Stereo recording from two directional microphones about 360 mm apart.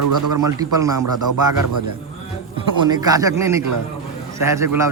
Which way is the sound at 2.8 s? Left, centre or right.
Centre.